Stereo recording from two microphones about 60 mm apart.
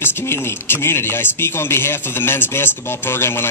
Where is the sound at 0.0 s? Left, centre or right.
Left.